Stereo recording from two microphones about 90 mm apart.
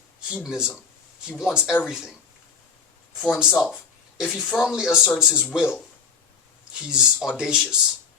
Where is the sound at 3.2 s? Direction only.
10° right (ahead or behind).